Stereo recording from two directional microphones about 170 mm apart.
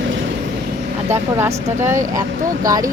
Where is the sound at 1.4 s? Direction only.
15° right (ahead or behind).